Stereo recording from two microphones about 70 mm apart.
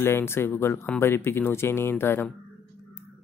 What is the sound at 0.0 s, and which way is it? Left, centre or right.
Speech, left.